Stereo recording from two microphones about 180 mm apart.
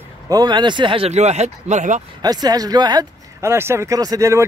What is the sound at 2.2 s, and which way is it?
Speech, 20° right (ahead or behind).